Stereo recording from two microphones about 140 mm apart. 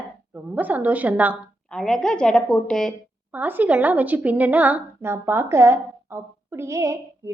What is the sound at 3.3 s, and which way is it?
A woman's voice, 15° right (ahead or behind).